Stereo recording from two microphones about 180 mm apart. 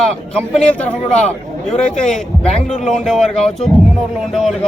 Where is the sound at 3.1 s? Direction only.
Centre (ahead or behind).